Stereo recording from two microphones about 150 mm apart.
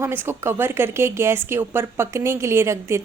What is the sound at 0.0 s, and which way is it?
Speech, 15° right (ahead or behind).